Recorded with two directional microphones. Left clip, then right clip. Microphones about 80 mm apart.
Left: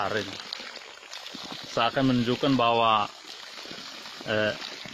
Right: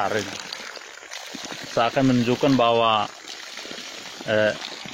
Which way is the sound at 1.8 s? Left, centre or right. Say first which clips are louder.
Right 4 dB; left.